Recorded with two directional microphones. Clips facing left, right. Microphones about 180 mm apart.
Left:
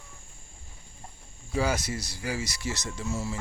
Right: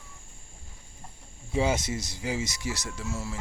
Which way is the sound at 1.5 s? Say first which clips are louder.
Right 1 dB; 25° right (ahead or behind).